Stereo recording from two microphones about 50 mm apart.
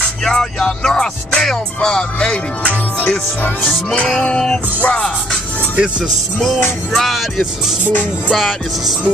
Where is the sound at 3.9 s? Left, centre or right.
Left.